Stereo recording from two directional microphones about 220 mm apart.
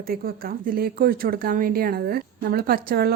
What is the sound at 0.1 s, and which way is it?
Speech, 40° right (ahead or behind).